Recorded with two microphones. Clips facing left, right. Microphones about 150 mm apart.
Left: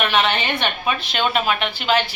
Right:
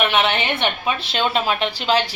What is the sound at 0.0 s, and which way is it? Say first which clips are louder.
A woman's voice: right 1 dB; 20° right (ahead or behind).